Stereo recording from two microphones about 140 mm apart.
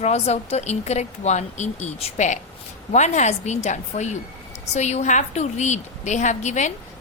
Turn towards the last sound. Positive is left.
turn(degrees=60)  # may be behind; listen again after turning